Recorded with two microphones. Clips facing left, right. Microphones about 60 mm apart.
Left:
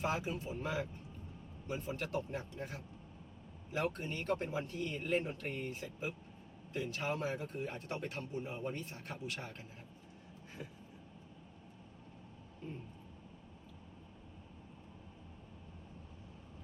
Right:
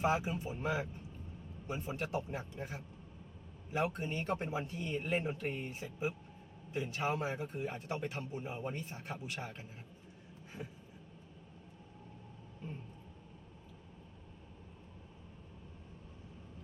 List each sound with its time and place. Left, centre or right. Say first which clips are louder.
0.0 s a man's voice: right 4 dB; centre
3.8 s a man's voice: even; centre
8.9 s a man's voice: right 1 dB; centre